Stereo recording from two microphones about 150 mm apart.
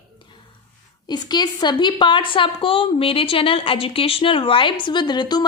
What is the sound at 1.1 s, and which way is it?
A woman's voice, 30° left (ahead or behind).